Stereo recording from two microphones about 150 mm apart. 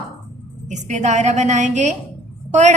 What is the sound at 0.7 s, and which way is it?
A woman's voice, 55° right (ahead or behind).